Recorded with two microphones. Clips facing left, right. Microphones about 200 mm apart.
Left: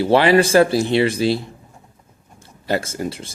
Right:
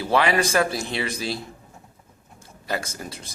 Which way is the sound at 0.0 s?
30° left (ahead or behind).